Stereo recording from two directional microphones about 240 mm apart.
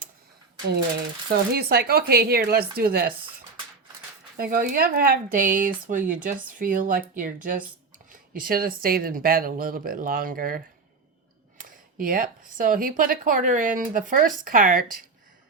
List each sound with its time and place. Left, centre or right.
1.3 s speech: right
4.4 s speech: right
11.6 s speech: right